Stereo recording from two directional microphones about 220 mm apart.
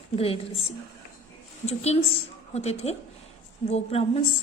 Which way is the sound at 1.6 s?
30° left (ahead or behind).